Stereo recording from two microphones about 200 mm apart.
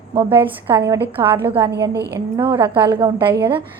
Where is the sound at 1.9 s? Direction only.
55° right (ahead or behind).